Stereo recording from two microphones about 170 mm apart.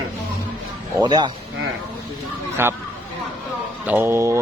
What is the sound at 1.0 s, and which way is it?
Speech, 25° right (ahead or behind).